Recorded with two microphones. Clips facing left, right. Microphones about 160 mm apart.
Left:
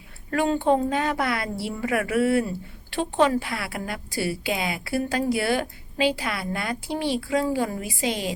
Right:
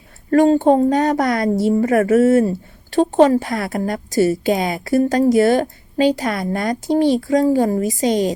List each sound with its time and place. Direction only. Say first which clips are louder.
0.3 s a woman's voice: right 9 dB; 40° right (ahead or behind)